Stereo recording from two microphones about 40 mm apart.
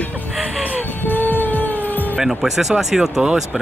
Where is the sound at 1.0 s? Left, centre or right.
Left.